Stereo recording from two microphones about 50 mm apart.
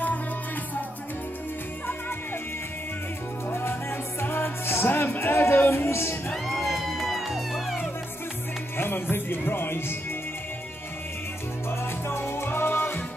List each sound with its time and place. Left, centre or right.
4.2 s music: left
5.9 s music: left
6.3 s music: centre
8.7 s music: left
11.8 s music: left